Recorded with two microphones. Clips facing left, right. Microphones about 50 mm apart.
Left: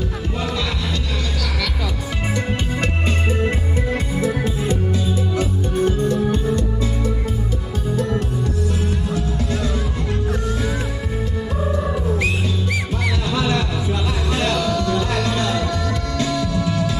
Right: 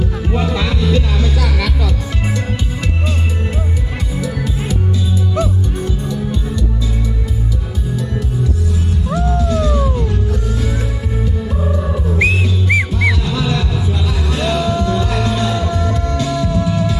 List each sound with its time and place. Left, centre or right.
5.4 s music: left
12.1 s music: right
13.3 s music: left
14.4 s music: centre
16.2 s music: centre